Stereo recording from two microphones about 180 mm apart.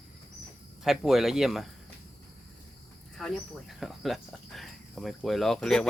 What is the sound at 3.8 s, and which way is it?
Speech, centre (ahead or behind).